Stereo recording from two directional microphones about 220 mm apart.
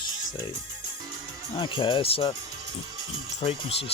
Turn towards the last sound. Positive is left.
turn(degrees=30)  # may be behind; listen again after turning